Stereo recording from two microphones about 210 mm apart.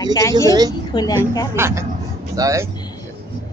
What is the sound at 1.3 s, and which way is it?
Speech, 20° left (ahead or behind).